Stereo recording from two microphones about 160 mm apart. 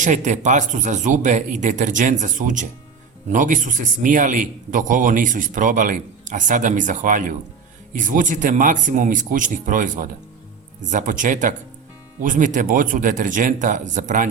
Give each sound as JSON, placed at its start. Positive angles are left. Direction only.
{"t": 0.0, "sound": "speech", "side_deg": -50}